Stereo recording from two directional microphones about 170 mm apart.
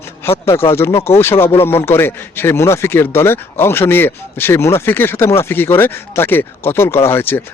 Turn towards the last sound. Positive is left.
turn(degrees=15)  # may be behind; listen again after turning